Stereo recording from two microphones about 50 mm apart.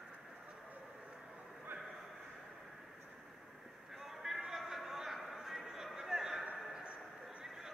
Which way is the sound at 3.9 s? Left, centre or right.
Centre.